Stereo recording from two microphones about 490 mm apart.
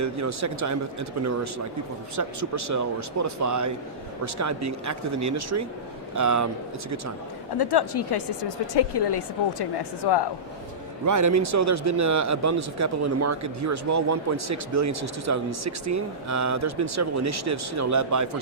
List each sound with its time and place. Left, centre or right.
0.0 s speech: right
7.6 s speech: left
11.0 s speech: right